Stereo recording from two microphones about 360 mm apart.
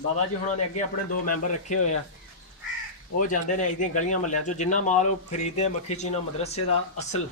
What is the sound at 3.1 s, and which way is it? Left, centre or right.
Speech, left.